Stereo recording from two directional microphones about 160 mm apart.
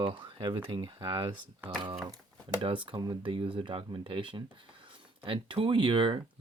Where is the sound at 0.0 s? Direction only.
30° right (ahead or behind).